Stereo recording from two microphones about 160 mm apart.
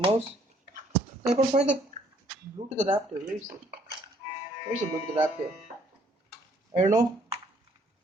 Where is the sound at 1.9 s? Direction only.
50° right (ahead or behind).